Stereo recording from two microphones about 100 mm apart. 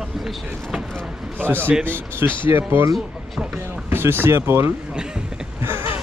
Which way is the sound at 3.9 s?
20° right (ahead or behind).